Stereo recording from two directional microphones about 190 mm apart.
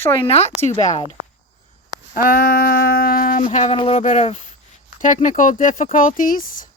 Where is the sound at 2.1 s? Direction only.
50° left (ahead or behind).